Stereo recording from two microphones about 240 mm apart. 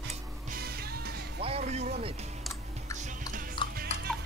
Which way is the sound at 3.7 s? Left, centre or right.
Right.